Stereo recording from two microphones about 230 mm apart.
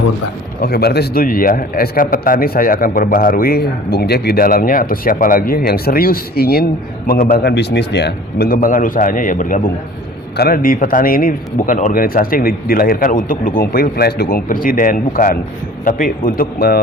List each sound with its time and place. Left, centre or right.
0.6 s a man's voice: left